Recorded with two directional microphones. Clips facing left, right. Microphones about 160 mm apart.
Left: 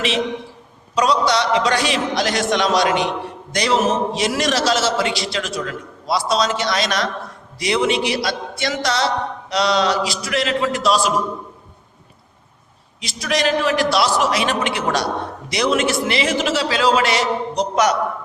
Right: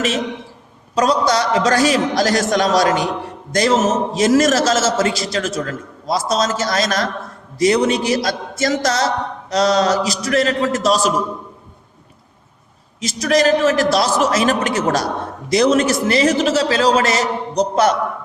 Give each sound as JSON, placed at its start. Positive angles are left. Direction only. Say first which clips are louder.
{"t": 0.9, "sound": "a man's voice", "louder": "right 1 dB", "side_deg": -45}
{"t": 13.0, "sound": "a man's voice", "louder": "right 6 dB", "side_deg": -45}